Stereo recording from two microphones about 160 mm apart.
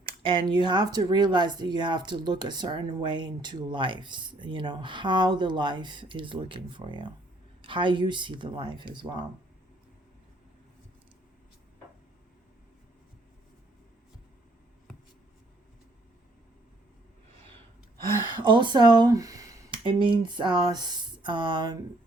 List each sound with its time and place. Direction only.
0.2 s speech: 30° right (ahead or behind)
17.9 s speech: 30° right (ahead or behind)